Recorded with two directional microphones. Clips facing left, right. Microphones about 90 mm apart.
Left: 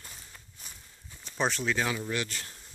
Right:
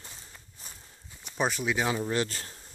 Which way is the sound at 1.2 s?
10° right (ahead or behind).